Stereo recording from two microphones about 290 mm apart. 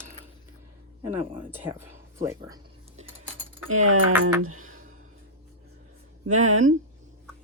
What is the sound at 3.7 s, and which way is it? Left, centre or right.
Speech, right.